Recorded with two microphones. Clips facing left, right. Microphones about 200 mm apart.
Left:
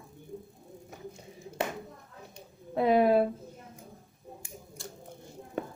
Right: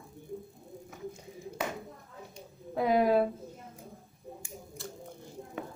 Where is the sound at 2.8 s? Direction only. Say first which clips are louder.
Left 3 dB; 60° left (ahead or behind).